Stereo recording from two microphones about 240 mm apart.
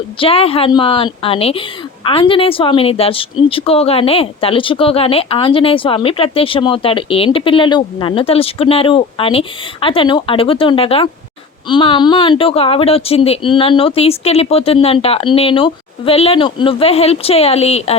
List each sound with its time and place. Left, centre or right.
0.2 s a woman's voice: left